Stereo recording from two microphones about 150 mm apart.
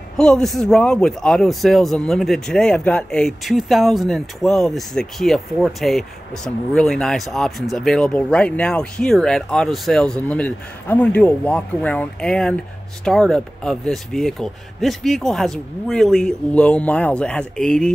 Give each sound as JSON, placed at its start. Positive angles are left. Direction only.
{"t": 0.2, "sound": "a man's voice", "side_deg": 5}